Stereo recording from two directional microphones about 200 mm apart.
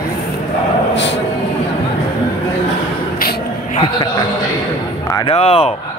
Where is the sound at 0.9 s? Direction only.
65° left (ahead or behind).